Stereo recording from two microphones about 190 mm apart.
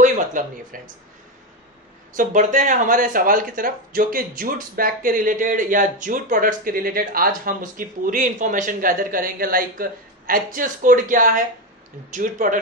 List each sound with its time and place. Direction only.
0.0 s speech: 45° right (ahead or behind)
2.1 s speech: 45° right (ahead or behind)